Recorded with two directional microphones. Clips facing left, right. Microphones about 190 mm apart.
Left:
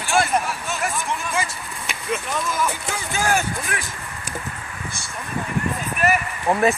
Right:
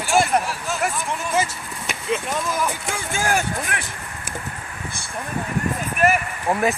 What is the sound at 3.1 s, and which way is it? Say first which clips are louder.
Speech: left 1 dB; 50° right (ahead or behind).